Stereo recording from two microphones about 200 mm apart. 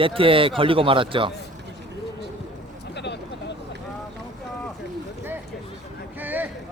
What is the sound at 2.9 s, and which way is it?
Vehicle, 60° left (ahead or behind).